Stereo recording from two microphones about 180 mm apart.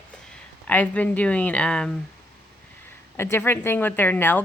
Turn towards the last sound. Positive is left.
turn(degrees=10)  # may be behind; listen again after turning